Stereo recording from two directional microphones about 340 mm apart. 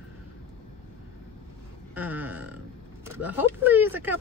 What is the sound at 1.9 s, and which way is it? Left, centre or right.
Speech, centre.